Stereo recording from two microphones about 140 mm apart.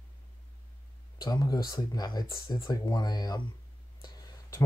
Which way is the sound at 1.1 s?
30° left (ahead or behind).